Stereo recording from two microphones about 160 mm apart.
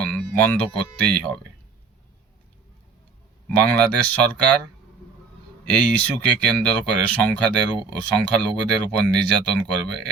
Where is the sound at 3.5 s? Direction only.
10° left (ahead or behind).